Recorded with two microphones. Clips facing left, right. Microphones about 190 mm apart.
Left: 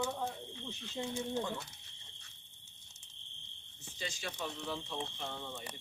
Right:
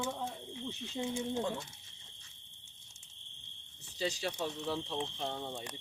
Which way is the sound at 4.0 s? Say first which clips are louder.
Right 6 dB; 35° right (ahead or behind).